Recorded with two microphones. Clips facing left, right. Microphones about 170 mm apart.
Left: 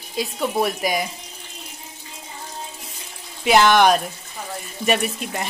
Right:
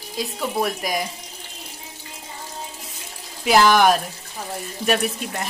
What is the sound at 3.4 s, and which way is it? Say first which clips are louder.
Speech: left 1 dB; centre (ahead or behind).